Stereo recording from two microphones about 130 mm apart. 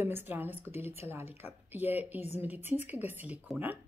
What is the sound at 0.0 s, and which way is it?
A woman's voice, 15° right (ahead or behind).